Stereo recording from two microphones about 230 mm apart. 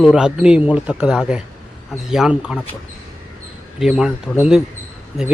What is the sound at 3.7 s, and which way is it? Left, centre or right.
Speech, centre.